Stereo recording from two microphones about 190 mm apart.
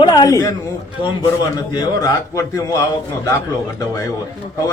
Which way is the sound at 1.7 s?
20° left (ahead or behind).